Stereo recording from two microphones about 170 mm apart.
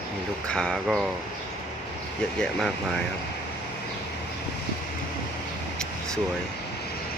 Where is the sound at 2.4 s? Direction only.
5° left (ahead or behind).